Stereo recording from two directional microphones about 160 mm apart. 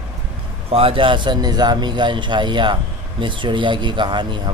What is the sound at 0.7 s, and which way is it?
A man's voice, 35° right (ahead or behind).